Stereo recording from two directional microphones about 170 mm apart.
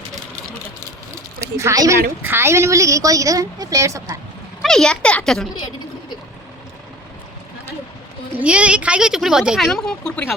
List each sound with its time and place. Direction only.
1.4 s a woman's voice: 15° right (ahead or behind)
4.6 s speech: 5° left (ahead or behind)
5.5 s a sound: 25° left (ahead or behind)
8.4 s speech: 5° right (ahead or behind)